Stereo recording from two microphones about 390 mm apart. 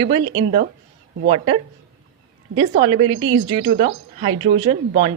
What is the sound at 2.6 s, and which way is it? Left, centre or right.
Speech, centre.